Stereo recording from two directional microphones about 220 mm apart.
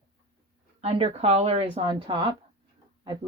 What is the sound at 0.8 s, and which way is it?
Speech, 25° right (ahead or behind).